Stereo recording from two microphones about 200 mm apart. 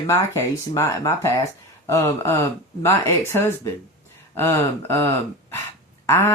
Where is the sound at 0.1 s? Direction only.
15° left (ahead or behind).